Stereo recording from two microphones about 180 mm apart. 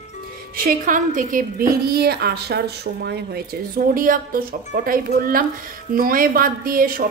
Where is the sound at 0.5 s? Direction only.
50° right (ahead or behind).